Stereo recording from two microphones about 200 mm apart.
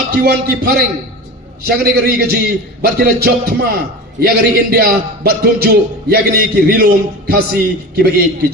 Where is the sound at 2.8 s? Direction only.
50° right (ahead or behind).